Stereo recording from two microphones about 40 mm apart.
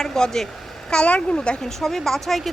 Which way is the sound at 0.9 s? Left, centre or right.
Left.